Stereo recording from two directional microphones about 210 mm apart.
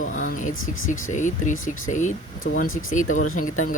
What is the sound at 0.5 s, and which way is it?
Speech, 75° left (ahead or behind).